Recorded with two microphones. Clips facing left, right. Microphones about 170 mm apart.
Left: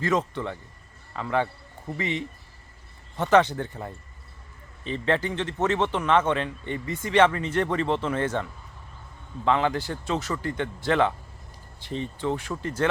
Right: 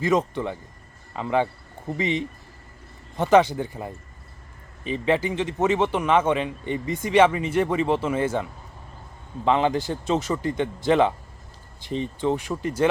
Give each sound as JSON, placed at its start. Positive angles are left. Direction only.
{"t": 0.0, "sound": "a man's voice", "side_deg": -15}
{"t": 9.4, "sound": "a man's voice", "side_deg": -20}